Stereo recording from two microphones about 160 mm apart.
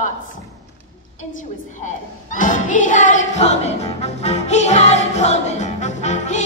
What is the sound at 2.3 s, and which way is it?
Music, 55° left (ahead or behind).